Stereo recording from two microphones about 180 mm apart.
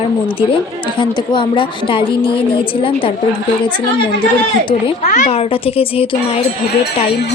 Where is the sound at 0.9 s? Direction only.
25° left (ahead or behind).